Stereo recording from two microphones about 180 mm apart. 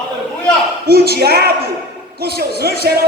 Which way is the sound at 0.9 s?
60° right (ahead or behind).